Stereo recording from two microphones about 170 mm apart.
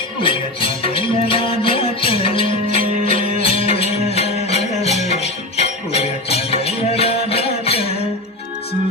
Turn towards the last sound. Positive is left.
turn(degrees=35)  # may be behind; listen again after turning